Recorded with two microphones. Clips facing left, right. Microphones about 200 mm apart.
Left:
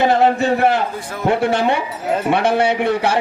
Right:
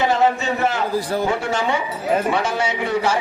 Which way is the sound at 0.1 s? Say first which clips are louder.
Left 4 dB; 60° left (ahead or behind).